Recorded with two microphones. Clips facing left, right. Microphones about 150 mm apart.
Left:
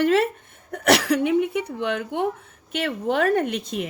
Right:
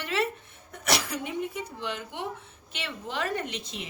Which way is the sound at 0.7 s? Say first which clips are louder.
Left 11 dB; 65° left (ahead or behind).